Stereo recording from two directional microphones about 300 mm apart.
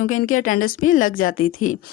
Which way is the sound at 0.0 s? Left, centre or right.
Left.